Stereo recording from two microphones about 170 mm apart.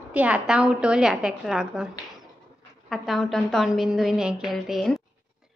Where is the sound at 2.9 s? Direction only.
Centre (ahead or behind).